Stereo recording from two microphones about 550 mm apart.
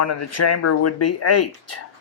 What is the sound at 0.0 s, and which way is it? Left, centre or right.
Speech, left.